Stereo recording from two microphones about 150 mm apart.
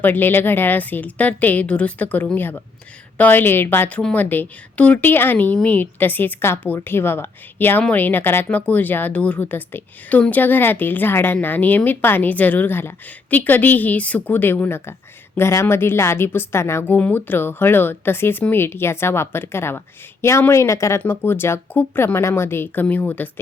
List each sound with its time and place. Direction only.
0.0 s a woman's voice: 15° left (ahead or behind)